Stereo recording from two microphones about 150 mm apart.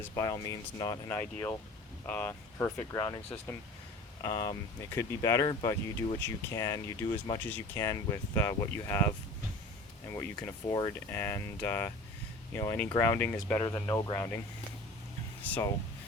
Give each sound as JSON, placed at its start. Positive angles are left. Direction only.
{"t": 0.0, "sound": "speech", "side_deg": 20}
{"t": 4.2, "sound": "speech", "side_deg": 20}
{"t": 10.2, "sound": "speech", "side_deg": 20}
{"t": 15.4, "sound": "speech", "side_deg": 10}